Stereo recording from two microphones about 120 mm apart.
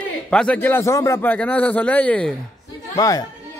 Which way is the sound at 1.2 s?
10° left (ahead or behind).